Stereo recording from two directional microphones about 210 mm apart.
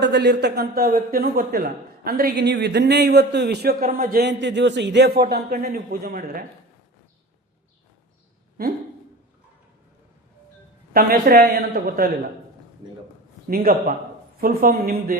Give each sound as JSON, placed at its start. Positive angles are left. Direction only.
{"t": 0.0, "sound": "speech", "side_deg": -55}
{"t": 10.9, "sound": "speech", "side_deg": -45}
{"t": 13.5, "sound": "speech", "side_deg": -45}